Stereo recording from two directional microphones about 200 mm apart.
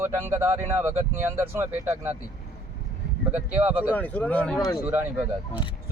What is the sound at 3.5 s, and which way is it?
Speech, 10° right (ahead or behind).